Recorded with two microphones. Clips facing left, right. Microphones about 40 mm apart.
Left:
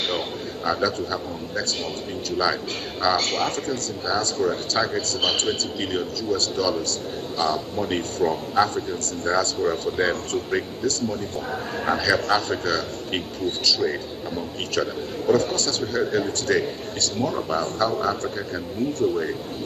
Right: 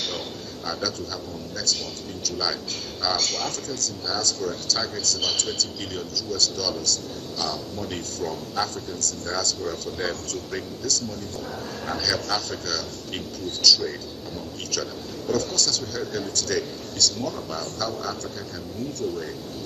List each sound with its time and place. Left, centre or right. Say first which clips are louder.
0.7 s a man's voice: left 6 dB; left
2.2 s a man's voice: left 5 dB; left